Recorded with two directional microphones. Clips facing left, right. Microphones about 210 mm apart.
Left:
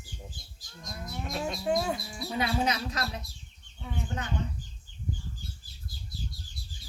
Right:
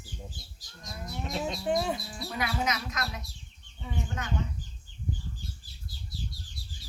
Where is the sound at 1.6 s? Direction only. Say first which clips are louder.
Left 1 dB; centre (ahead or behind).